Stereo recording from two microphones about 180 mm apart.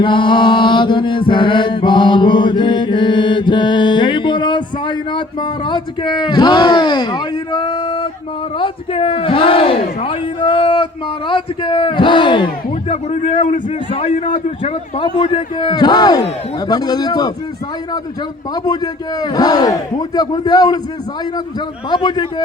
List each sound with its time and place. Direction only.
0.0 s chant: 25° left (ahead or behind)
8.5 s a man's voice: 30° left (ahead or behind)
18.5 s a man's voice: 20° left (ahead or behind)
21.8 s a man's voice: 25° left (ahead or behind)